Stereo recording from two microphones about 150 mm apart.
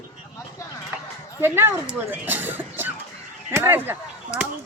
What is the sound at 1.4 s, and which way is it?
Speech, 15° right (ahead or behind).